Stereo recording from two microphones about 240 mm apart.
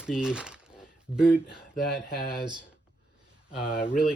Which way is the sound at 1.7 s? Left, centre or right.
Left.